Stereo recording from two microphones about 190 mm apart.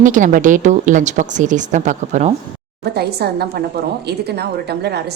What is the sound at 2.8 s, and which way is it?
A woman's voice, 60° right (ahead or behind).